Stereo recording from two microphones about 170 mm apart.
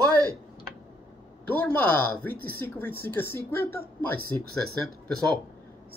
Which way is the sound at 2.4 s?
60° right (ahead or behind).